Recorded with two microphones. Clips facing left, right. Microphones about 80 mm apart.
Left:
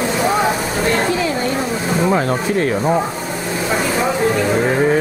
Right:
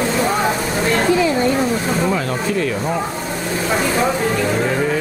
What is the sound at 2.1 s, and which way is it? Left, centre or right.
Rub, left.